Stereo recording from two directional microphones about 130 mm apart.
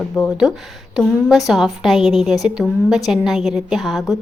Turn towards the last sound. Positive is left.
turn(degrees=0)  # may be behind; listen again after turning